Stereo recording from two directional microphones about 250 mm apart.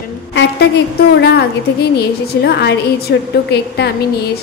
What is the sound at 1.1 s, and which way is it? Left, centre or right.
A woman's voice, left.